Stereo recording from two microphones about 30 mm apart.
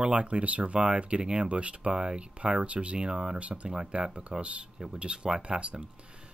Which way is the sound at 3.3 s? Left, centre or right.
Right.